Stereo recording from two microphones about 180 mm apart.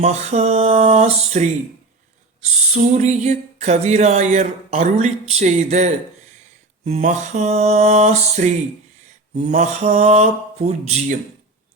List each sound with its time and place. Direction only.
0.0 s speech: 40° right (ahead or behind)
3.0 s speech: 40° right (ahead or behind)